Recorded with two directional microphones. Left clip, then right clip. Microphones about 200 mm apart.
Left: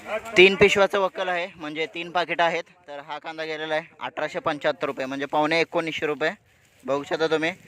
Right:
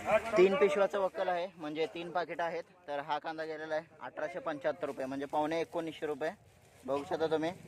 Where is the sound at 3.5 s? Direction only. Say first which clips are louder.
Left 10 dB; 25° left (ahead or behind).